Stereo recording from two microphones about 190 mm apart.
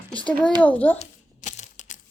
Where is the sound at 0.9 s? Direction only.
40° left (ahead or behind).